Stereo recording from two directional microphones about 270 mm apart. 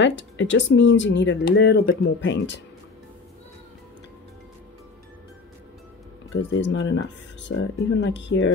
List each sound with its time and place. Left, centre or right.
0.0 s speech: left
6.3 s speech: left